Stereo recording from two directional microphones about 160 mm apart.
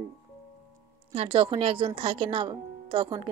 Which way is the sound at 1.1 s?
35° right (ahead or behind).